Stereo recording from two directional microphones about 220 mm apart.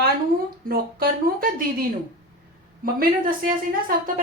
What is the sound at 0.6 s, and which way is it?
A woman's voice, 45° right (ahead or behind).